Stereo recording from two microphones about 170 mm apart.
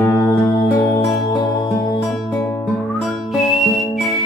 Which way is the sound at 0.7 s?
15° left (ahead or behind).